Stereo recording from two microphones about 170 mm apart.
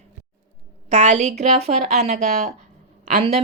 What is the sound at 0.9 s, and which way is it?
Speech, 40° right (ahead or behind).